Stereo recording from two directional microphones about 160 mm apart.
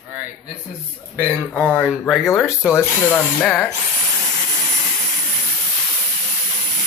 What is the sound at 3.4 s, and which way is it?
Speech, 5° left (ahead or behind).